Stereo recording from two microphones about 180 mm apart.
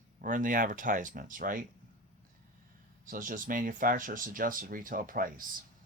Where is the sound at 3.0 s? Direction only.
50° right (ahead or behind).